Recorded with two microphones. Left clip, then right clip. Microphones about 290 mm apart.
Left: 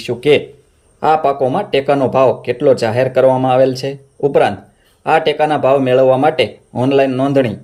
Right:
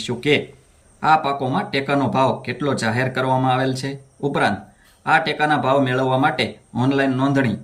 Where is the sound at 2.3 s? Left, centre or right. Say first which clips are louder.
Left 9 dB; left.